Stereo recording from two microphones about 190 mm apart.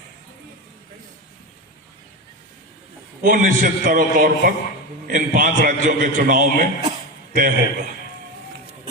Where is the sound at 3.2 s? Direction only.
45° right (ahead or behind).